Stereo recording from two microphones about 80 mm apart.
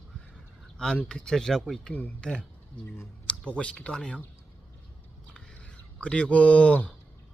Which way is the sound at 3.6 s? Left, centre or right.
Centre.